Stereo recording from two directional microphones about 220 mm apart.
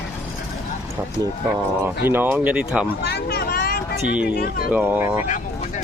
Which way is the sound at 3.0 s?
50° left (ahead or behind).